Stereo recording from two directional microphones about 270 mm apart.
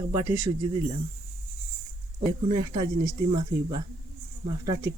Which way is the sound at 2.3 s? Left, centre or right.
Centre.